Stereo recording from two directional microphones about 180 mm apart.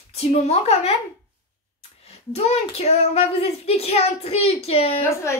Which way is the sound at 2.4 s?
35° left (ahead or behind).